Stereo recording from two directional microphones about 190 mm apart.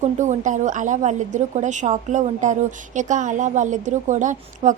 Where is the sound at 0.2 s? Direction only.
40° right (ahead or behind).